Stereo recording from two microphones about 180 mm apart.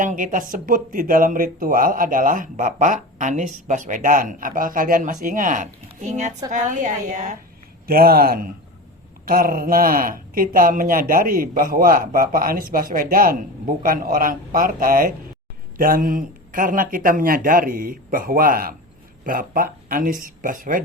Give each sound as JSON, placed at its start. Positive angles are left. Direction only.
{"t": 0.0, "sound": "speech", "side_deg": -45}
{"t": 7.9, "sound": "a man's voice", "side_deg": -55}